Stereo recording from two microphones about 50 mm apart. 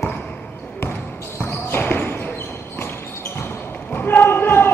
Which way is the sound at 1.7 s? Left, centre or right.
Left.